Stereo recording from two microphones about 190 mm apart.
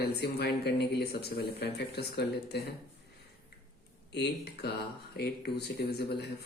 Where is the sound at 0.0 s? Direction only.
55° left (ahead or behind).